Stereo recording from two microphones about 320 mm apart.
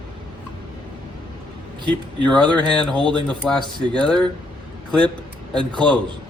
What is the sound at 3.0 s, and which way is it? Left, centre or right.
Speech, centre.